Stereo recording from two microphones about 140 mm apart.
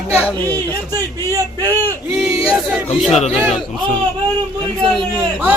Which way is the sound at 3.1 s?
50° left (ahead or behind).